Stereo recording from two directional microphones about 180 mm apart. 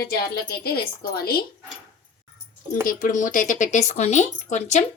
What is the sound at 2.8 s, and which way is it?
A woman's voice, 50° left (ahead or behind).